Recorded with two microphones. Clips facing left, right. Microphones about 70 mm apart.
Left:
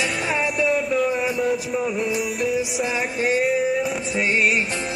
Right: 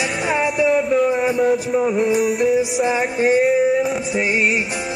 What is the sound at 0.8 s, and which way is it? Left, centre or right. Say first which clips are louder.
Music: right 5 dB; centre.